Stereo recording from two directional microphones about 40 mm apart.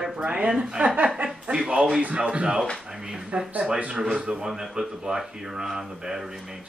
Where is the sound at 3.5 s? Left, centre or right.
Right.